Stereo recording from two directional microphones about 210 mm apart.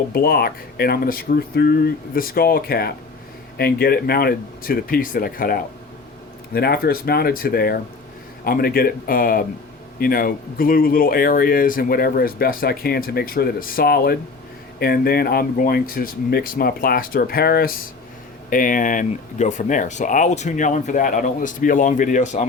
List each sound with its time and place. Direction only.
0.1 s speech: 45° left (ahead or behind)